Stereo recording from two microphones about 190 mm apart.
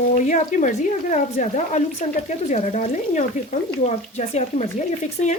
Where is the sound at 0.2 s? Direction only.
40° left (ahead or behind).